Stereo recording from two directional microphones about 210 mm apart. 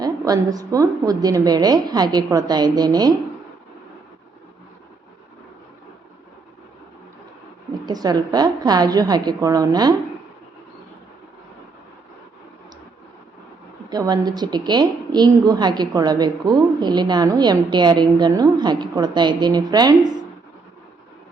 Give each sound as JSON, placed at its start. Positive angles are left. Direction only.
{"t": 0.0, "sound": "a woman's voice", "side_deg": -15}
{"t": 7.7, "sound": "a woman's voice", "side_deg": -20}
{"t": 13.9, "sound": "a woman's voice", "side_deg": -20}